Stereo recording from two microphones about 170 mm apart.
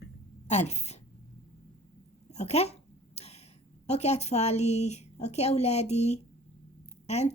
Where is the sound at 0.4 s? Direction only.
40° left (ahead or behind).